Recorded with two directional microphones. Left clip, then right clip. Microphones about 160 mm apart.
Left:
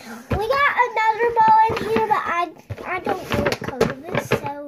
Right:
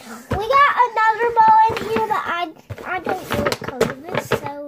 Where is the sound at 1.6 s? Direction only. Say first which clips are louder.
Right 1 dB; 15° left (ahead or behind).